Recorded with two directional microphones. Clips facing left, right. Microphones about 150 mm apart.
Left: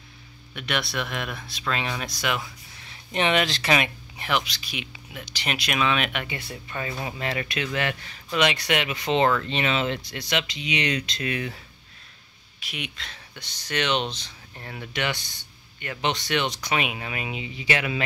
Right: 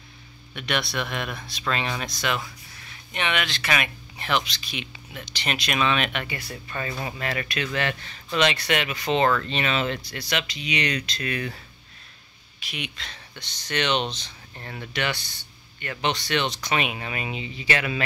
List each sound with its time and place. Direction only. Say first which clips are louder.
0.6 s speech: right 1 dB; centre (ahead or behind)
2.8 s speech: left 5 dB; 30° left (ahead or behind)
4.2 s speech: right 1 dB; 10° left (ahead or behind)
6.2 s speech: even; 20° left (ahead or behind)
12.5 s speech: right 1 dB; 5° left (ahead or behind)